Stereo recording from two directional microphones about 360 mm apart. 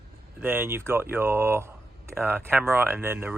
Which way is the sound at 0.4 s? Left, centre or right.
Centre.